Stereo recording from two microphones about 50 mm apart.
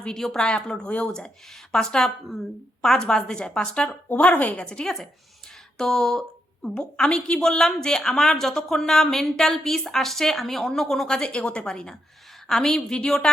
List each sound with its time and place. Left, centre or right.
0.0 s speech: centre
1.7 s speech: centre